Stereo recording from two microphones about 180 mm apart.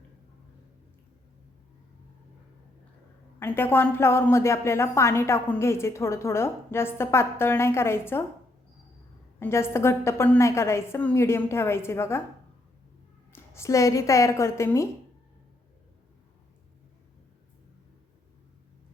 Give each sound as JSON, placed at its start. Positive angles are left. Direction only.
{"t": 3.4, "sound": "speech", "side_deg": 10}
{"t": 9.4, "sound": "speech", "side_deg": 15}
{"t": 13.3, "sound": "speech", "side_deg": 15}